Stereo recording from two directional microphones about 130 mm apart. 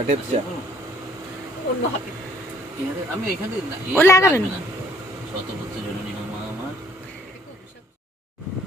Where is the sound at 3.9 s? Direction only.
20° left (ahead or behind).